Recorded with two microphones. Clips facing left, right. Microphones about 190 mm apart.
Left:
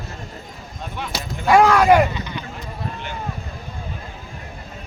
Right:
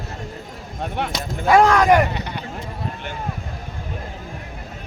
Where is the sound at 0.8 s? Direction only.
60° right (ahead or behind).